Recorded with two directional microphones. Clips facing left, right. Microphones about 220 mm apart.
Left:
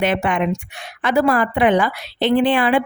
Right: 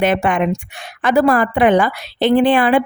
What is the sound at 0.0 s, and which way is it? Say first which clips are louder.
A woman's voice: right 3 dB; 45° right (ahead or behind).